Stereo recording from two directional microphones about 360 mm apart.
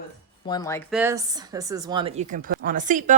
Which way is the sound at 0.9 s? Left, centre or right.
Centre.